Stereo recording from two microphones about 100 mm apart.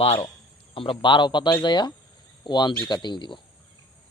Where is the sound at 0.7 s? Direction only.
60° left (ahead or behind).